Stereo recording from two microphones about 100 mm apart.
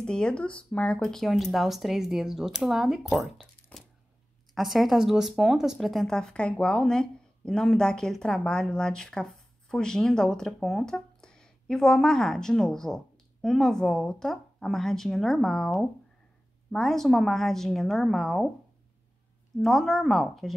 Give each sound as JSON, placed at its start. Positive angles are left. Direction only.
{"t": 0.0, "sound": "speech", "side_deg": 10}
{"t": 3.7, "sound": "a sound", "side_deg": 15}
{"t": 4.6, "sound": "speech", "side_deg": 0}
{"t": 19.6, "sound": "speech", "side_deg": 0}